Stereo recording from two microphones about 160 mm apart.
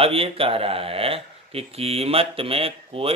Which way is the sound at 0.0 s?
35° right (ahead or behind).